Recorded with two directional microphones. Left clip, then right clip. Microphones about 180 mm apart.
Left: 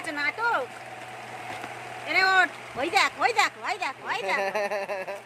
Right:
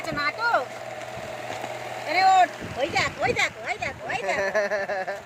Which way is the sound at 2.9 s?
70° left (ahead or behind).